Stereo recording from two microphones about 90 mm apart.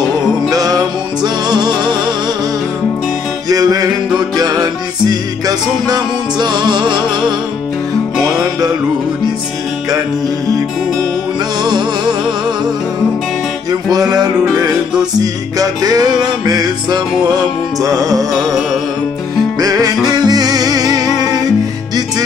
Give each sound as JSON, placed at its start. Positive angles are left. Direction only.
{"t": 0.5, "sound": "music", "side_deg": -40}
{"t": 3.4, "sound": "music", "side_deg": -45}
{"t": 8.4, "sound": "music", "side_deg": -40}
{"t": 11.6, "sound": "music", "side_deg": -50}
{"t": 13.7, "sound": "music", "side_deg": -45}
{"t": 18.3, "sound": "music", "side_deg": 0}
{"t": 19.6, "sound": "music", "side_deg": -40}